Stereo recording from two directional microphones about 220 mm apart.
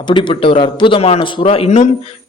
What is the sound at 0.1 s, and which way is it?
A man's voice, 20° left (ahead or behind).